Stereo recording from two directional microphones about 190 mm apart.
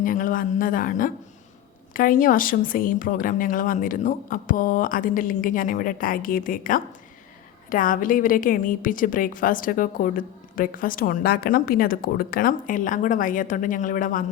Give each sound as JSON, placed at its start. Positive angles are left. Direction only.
{"t": 0.0, "sound": "a woman's voice", "side_deg": 45}